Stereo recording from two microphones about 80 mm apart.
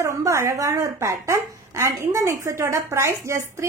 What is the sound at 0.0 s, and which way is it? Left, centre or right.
Speech, right.